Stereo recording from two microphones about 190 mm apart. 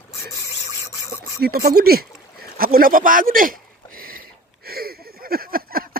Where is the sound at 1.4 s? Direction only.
55° right (ahead or behind).